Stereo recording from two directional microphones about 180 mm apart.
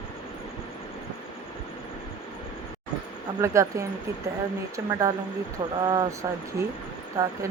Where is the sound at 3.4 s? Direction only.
15° right (ahead or behind).